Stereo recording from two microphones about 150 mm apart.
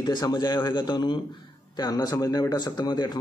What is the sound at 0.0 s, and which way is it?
Speech, 30° left (ahead or behind).